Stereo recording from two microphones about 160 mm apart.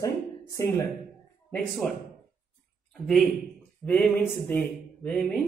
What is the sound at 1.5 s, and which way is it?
Speech, centre (ahead or behind).